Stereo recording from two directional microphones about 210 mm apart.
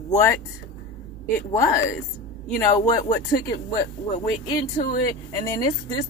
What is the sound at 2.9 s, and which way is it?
Speech, 15° left (ahead or behind).